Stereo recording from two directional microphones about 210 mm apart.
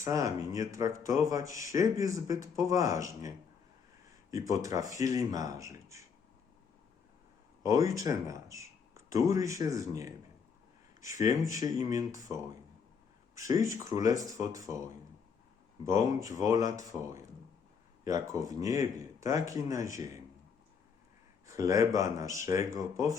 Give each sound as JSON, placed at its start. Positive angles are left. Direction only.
{"t": 0.0, "sound": "speech", "side_deg": -15}
{"t": 7.6, "sound": "speech", "side_deg": -15}
{"t": 11.2, "sound": "speech", "side_deg": -15}
{"t": 13.5, "sound": "speech", "side_deg": -15}
{"t": 15.9, "sound": "speech", "side_deg": -15}
{"t": 21.4, "sound": "speech", "side_deg": -15}